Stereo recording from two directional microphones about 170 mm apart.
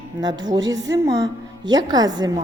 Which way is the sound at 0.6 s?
90° right.